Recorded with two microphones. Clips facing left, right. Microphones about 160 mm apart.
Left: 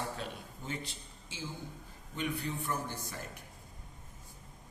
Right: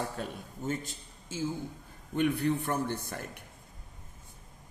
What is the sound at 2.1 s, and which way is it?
A man's voice, 60° right (ahead or behind).